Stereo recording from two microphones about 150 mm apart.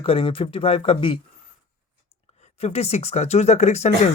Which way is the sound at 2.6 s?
45° left (ahead or behind).